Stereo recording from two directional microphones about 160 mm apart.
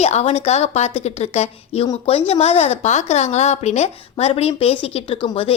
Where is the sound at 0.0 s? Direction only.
40° left (ahead or behind).